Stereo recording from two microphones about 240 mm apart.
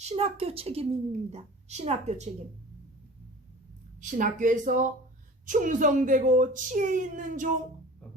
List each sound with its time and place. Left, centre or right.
0.0 s a woman's voice: right
4.0 s speech: right